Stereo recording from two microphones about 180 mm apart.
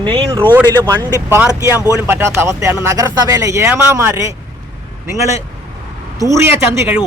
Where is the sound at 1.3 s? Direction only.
10° right (ahead or behind).